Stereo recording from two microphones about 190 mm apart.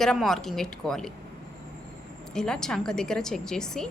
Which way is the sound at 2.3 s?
5° left (ahead or behind).